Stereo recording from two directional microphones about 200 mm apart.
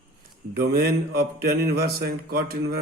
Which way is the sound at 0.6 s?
50° right (ahead or behind).